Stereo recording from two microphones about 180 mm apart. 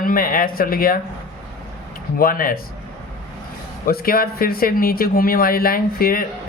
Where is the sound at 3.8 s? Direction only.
55° left (ahead or behind).